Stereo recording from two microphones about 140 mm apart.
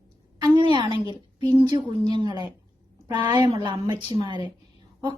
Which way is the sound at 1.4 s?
30° right (ahead or behind).